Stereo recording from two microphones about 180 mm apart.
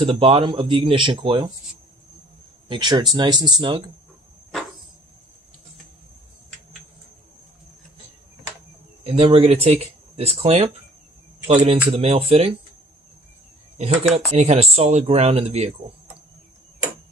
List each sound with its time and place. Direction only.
0.0 s speech: 30° right (ahead or behind)
2.7 s speech: 25° right (ahead or behind)
9.0 s speech: 35° right (ahead or behind)
14.3 s speech: 35° right (ahead or behind)